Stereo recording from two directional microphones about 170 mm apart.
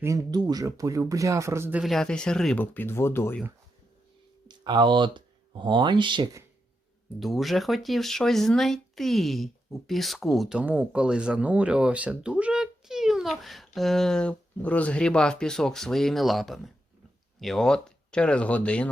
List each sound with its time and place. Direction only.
0.0 s speech: 20° right (ahead or behind)
1.8 s speech: centre (ahead or behind)
4.4 s speech: 25° right (ahead or behind)
7.2 s speech: centre (ahead or behind)